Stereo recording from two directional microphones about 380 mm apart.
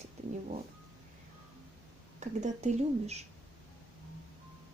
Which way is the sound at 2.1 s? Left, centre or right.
Centre.